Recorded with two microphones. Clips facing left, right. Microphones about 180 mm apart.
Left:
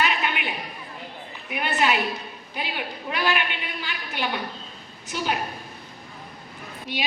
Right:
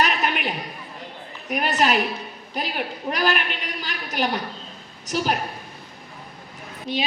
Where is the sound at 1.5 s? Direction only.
40° right (ahead or behind).